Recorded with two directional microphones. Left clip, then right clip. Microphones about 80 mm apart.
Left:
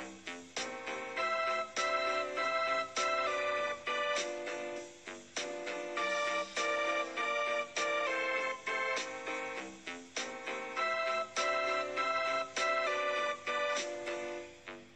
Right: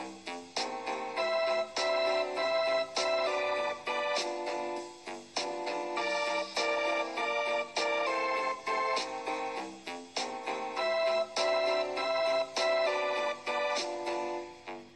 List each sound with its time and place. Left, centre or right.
0.6 s organ: right
5.3 s music: right